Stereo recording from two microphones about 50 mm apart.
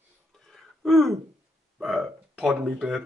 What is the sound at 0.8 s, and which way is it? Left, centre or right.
A man's voice, centre.